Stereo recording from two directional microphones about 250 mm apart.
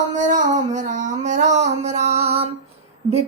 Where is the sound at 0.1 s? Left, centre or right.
Right.